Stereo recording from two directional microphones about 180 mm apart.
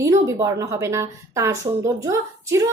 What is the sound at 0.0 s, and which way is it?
A woman's voice, 20° right (ahead or behind).